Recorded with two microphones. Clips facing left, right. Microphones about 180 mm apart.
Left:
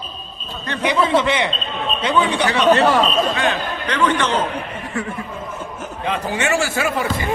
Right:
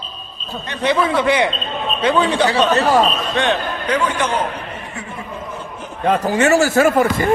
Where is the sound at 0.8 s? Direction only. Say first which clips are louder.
Right 1 dB; 20° left (ahead or behind).